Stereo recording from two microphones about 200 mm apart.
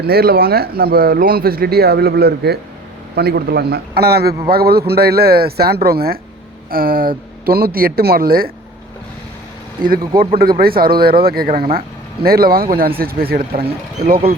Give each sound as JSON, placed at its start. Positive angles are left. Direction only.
{"t": 0.0, "sound": "speech", "side_deg": -50}
{"t": 10.2, "sound": "speech", "side_deg": -50}
{"t": 13.5, "sound": "speech", "side_deg": -30}